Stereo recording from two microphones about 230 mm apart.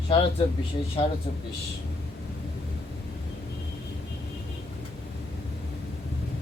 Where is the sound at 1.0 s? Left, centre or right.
Left.